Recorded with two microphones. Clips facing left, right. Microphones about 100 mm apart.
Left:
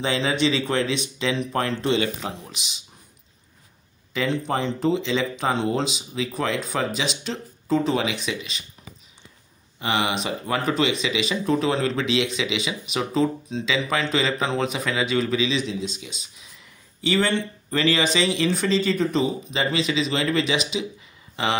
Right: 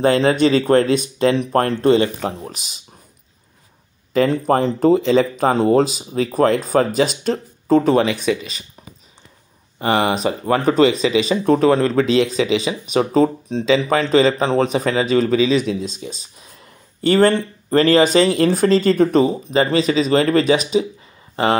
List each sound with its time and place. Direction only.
0.0 s speech: 50° right (ahead or behind)
4.1 s speech: 45° right (ahead or behind)
9.8 s speech: 45° right (ahead or behind)
15.9 s speech: 40° right (ahead or behind)